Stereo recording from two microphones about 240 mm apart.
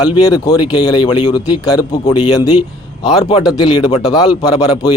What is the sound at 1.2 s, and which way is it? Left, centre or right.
Speech, left.